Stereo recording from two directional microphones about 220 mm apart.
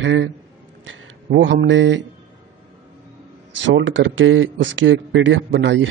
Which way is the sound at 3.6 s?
55° right (ahead or behind).